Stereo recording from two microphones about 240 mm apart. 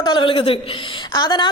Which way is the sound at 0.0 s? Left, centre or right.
Centre.